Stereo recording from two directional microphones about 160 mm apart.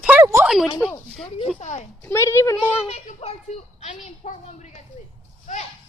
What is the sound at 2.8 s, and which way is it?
A child's voice, 40° left (ahead or behind).